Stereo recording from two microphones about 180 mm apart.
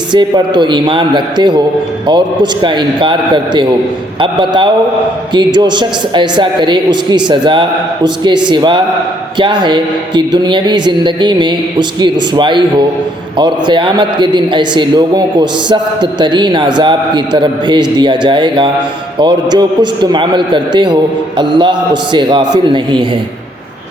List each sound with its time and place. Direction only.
0.1 s a man's voice: 25° right (ahead or behind)